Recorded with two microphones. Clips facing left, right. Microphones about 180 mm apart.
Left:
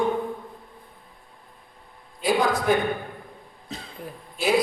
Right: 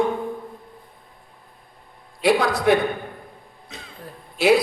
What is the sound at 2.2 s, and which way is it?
Speech, 70° right (ahead or behind).